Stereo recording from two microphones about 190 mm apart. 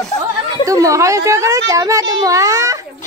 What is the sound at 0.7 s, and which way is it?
A child's voice, 15° right (ahead or behind).